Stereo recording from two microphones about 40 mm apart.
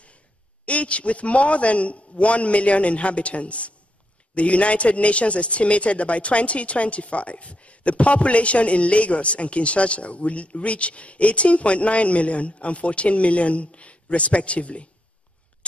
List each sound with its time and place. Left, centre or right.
0.7 s a man's voice: left